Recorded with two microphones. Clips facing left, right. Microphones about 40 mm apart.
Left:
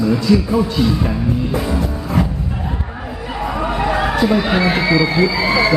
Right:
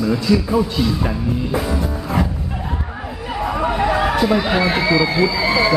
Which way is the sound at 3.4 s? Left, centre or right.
Centre.